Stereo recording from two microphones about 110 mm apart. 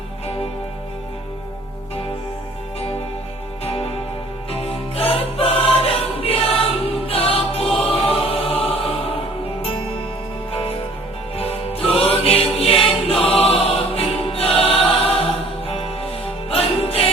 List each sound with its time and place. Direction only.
3.6 s music: 65° left (ahead or behind)
10.5 s music: 55° left (ahead or behind)